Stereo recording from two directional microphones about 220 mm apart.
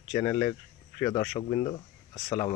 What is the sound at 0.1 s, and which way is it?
Speech, 15° left (ahead or behind).